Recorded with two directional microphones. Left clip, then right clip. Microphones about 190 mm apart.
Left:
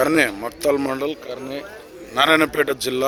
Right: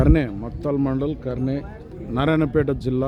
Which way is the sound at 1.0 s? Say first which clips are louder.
Even; 20° right (ahead or behind).